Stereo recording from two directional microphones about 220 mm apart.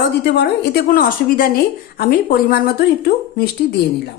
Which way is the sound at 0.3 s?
50° left (ahead or behind).